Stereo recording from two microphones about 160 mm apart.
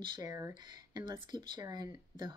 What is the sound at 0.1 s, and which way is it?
Speech, 20° right (ahead or behind).